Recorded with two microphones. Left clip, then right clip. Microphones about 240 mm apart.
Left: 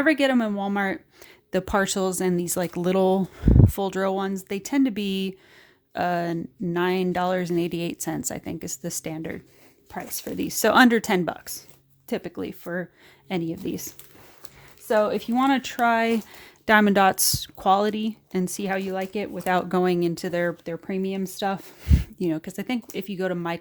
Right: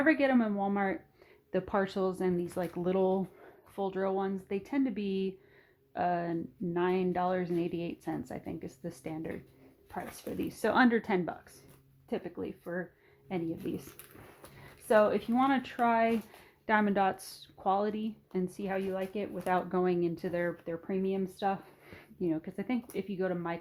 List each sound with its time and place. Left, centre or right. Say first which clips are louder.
0.0 s speech: left 6 dB; left
14.8 s speech: left 4 dB; left